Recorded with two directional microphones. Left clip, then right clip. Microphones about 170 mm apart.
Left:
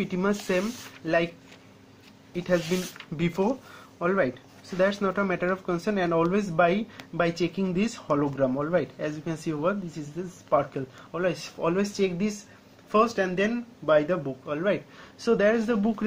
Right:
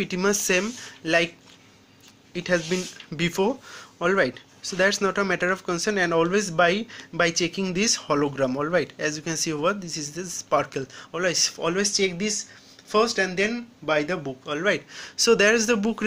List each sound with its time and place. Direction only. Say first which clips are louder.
0.0 s speech: right 4 dB; 20° right (ahead or behind)
2.3 s speech: right 2 dB; 15° right (ahead or behind)